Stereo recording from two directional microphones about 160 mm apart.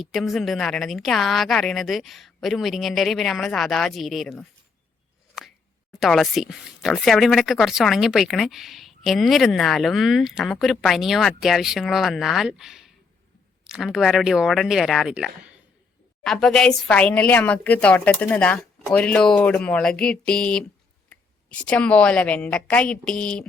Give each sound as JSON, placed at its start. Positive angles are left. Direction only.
{"t": 0.0, "sound": "speech", "side_deg": 0}
{"t": 6.0, "sound": "speech", "side_deg": 0}